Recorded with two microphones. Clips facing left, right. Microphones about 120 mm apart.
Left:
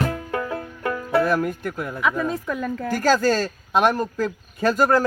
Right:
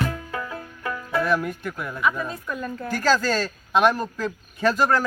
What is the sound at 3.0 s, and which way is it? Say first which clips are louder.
Speech: left 1 dB; 45° left (ahead or behind).